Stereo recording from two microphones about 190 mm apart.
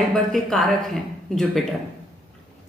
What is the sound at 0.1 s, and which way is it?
A woman's voice, centre (ahead or behind).